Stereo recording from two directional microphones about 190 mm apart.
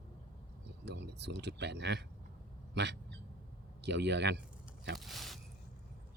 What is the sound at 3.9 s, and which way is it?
Speech, 65° right (ahead or behind).